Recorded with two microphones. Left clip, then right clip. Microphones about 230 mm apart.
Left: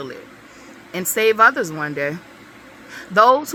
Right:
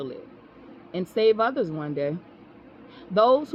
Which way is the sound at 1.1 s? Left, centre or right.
Centre.